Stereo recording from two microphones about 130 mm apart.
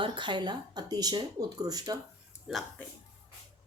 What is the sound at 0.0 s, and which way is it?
Speech, 35° right (ahead or behind).